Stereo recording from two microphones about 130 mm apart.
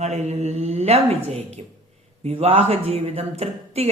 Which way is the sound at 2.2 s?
55° right (ahead or behind).